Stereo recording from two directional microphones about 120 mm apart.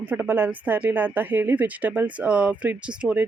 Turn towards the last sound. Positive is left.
turn(degrees=-10)  # may be behind; listen again after turning